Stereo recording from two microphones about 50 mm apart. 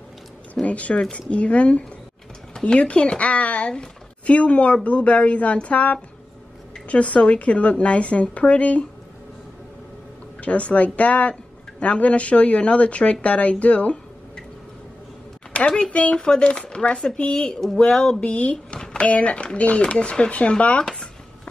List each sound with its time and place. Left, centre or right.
0.7 s a woman's voice: left
10.4 s a woman's voice: left
15.5 s a woman's voice: centre